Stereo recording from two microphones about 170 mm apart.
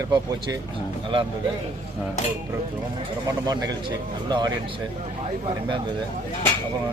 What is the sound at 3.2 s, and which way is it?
Speech, 25° right (ahead or behind).